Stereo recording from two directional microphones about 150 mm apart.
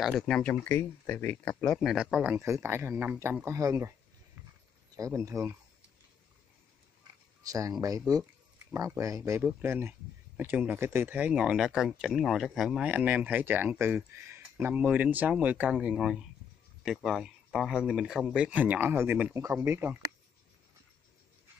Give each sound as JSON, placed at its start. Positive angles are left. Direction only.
{"t": 0.0, "sound": "speech", "side_deg": 5}
{"t": 2.3, "sound": "speech", "side_deg": -15}
{"t": 4.9, "sound": "speech", "side_deg": -20}
{"t": 7.4, "sound": "speech", "side_deg": -20}